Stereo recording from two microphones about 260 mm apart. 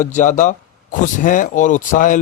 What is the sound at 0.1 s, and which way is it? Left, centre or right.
Speech, left.